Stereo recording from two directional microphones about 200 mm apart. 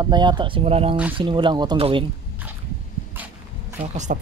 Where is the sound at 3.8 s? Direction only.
35° right (ahead or behind).